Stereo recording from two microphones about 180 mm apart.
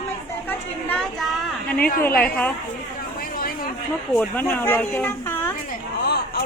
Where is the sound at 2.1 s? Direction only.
10° left (ahead or behind).